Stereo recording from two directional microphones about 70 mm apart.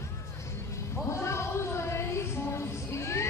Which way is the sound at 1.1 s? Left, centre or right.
Left.